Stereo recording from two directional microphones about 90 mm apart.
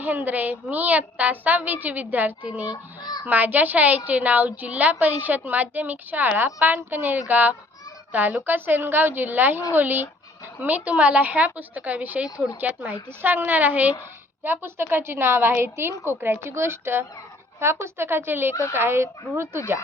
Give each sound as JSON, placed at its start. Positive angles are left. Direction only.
{"t": 0.0, "sound": "a woman's voice", "side_deg": -20}
{"t": 3.0, "sound": "a sound", "side_deg": 50}
{"t": 3.2, "sound": "a woman's voice", "side_deg": -20}